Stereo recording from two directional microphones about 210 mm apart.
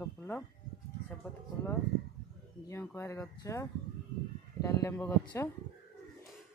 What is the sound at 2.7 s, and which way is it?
Speech, 10° left (ahead or behind).